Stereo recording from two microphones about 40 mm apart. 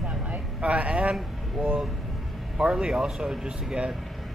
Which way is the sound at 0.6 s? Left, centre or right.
Right.